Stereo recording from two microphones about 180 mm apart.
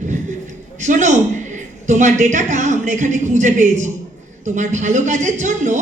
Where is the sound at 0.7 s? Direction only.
45° right (ahead or behind).